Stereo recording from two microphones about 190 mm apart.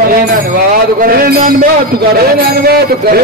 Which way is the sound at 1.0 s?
50° right (ahead or behind).